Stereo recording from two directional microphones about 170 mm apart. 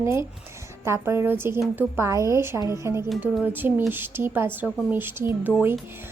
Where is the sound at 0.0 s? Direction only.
15° right (ahead or behind).